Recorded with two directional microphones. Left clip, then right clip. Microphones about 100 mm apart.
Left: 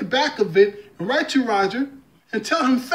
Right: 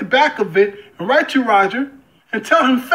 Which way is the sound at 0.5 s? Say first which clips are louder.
Right 1 dB; 30° left (ahead or behind).